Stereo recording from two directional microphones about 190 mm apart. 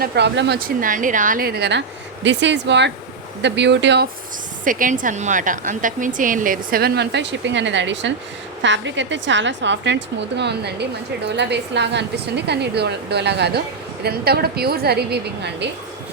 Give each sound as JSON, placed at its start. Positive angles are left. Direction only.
{"t": 0.0, "sound": "a woman's voice", "side_deg": -60}
{"t": 2.2, "sound": "a woman's voice", "side_deg": -70}
{"t": 4.6, "sound": "a woman's voice", "side_deg": -45}